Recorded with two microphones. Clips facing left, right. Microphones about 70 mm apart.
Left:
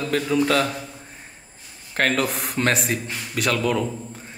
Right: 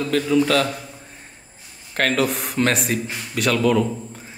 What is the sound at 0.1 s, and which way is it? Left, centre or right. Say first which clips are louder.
Speech: right 2 dB; centre.